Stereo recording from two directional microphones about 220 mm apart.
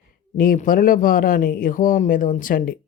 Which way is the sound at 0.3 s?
40° left (ahead or behind).